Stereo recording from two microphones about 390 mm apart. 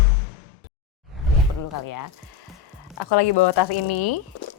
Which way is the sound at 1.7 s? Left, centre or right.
Left.